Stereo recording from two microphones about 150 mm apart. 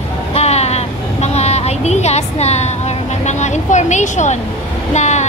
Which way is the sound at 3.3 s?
50° left (ahead or behind).